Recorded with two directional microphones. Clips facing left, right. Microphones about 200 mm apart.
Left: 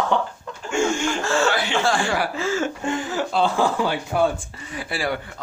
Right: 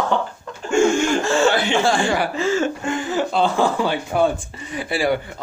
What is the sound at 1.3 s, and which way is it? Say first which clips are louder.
Speech: right 4 dB; 20° right (ahead or behind).